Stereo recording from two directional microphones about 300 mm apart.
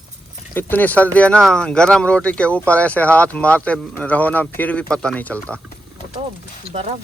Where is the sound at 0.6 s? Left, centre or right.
Centre.